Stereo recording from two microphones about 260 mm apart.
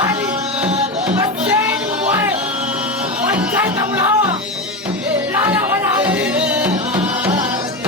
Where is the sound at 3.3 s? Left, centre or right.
Centre.